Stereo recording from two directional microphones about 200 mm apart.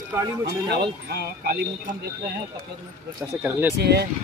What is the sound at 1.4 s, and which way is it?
Speech, 50° right (ahead or behind).